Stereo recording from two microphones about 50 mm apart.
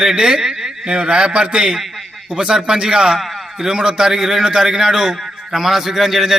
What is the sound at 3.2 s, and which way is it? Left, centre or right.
A man's voice, centre.